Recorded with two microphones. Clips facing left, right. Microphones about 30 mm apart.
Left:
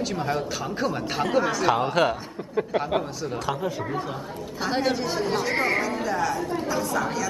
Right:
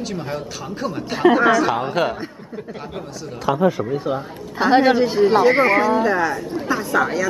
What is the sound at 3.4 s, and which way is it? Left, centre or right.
Speech, centre.